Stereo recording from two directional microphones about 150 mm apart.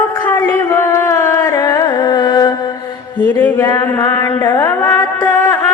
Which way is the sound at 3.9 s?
15° left (ahead or behind).